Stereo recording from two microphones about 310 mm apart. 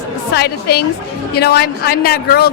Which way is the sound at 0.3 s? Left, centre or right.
Left.